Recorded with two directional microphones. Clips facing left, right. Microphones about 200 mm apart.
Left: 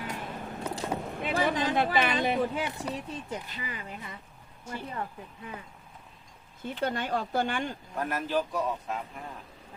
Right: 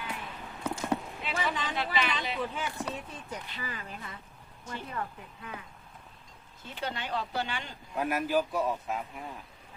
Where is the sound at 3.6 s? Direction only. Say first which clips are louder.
Left 1 dB; 20° left (ahead or behind).